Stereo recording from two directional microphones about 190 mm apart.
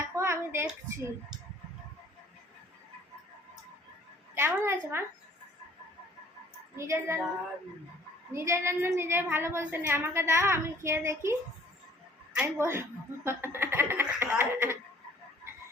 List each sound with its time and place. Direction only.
0.2 s a sound: 15° right (ahead or behind)
4.4 s a woman's voice: 10° right (ahead or behind)
6.7 s a woman's voice: 15° right (ahead or behind)
8.3 s a woman's voice: 15° right (ahead or behind)